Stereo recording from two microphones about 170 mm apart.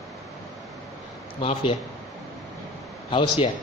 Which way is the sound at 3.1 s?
35° left (ahead or behind).